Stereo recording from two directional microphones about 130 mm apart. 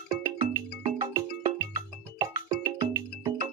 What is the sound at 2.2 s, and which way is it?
Music, 30° right (ahead or behind).